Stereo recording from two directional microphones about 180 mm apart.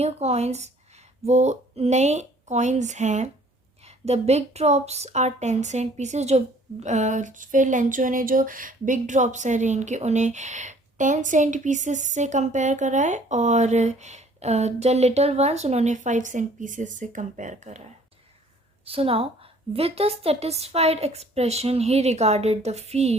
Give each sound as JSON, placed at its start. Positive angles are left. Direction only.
{"t": 0.0, "sound": "speech", "side_deg": -35}
{"t": 18.9, "sound": "speech", "side_deg": -30}